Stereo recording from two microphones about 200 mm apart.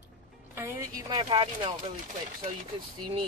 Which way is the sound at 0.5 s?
15° right (ahead or behind).